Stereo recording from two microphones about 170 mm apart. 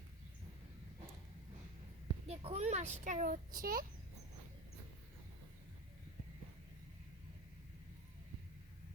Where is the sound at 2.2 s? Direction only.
35° right (ahead or behind); by 3.8 s 60° right (ahead or behind).